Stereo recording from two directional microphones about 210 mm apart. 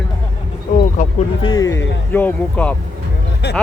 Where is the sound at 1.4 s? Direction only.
20° left (ahead or behind).